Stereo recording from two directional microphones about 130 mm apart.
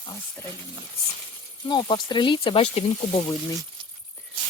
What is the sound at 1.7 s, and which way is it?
Speech, 35° left (ahead or behind).